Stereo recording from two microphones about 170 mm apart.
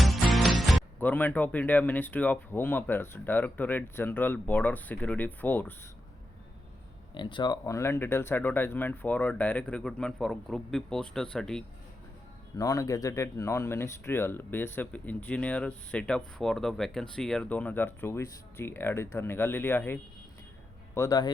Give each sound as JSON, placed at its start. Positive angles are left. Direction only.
{"t": 0.0, "sound": "music", "side_deg": 0}
{"t": 0.9, "sound": "speech", "side_deg": 10}
{"t": 7.1, "sound": "speech", "side_deg": 30}
{"t": 12.5, "sound": "speech", "side_deg": 20}